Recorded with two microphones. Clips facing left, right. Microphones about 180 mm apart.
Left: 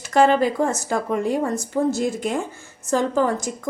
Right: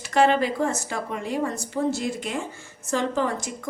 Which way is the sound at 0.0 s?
40° left (ahead or behind).